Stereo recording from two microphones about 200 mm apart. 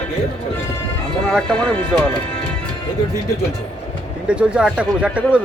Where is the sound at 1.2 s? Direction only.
Centre (ahead or behind).